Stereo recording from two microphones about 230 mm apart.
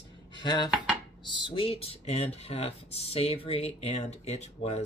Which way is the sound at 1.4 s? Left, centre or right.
Left.